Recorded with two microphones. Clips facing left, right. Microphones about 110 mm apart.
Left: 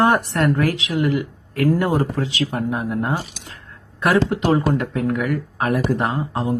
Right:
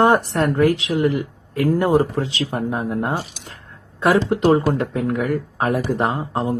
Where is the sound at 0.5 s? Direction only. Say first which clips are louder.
Right 3 dB; 25° right (ahead or behind).